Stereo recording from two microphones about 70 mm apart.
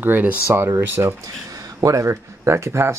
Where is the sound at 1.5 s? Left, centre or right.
Right.